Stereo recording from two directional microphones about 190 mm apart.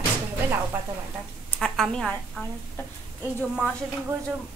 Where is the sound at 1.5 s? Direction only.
5° left (ahead or behind).